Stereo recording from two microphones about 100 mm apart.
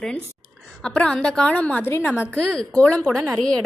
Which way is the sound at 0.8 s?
10° left (ahead or behind).